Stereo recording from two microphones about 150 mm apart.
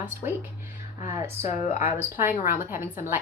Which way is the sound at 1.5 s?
50° left (ahead or behind).